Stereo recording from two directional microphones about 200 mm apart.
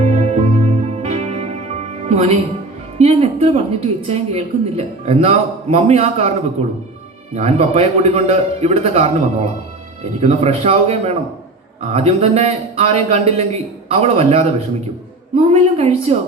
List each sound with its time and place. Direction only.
0.0 s music: 35° right (ahead or behind)
3.0 s a woman's voice: 30° right (ahead or behind)
7.3 s a woman's voice: 30° right (ahead or behind)